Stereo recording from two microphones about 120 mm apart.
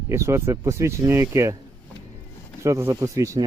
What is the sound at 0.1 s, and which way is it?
Speech, 25° right (ahead or behind).